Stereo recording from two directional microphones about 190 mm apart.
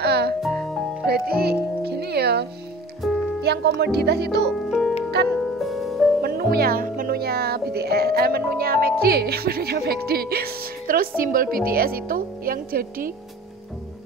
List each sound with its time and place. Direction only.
0.0 s music: 60° right (ahead or behind)
0.4 s music: centre (ahead or behind)
1.0 s music: 55° right (ahead or behind)
3.0 s music: centre (ahead or behind)
3.4 s speech: 60° right (ahead or behind)
4.5 s music: centre (ahead or behind)
6.2 s speech: 55° right (ahead or behind)